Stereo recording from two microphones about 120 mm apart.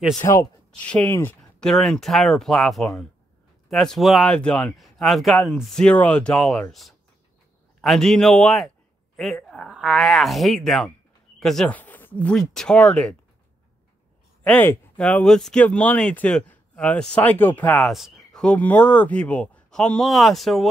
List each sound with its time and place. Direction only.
0.2 s speech: 25° left (ahead or behind)
0.7 s speech: 10° left (ahead or behind)
11.7 s speech: 15° left (ahead or behind)
14.4 s speech: 15° left (ahead or behind)
17.8 s speech: centre (ahead or behind)